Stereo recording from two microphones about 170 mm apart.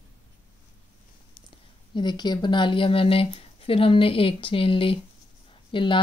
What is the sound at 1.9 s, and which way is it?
Speech, 25° left (ahead or behind).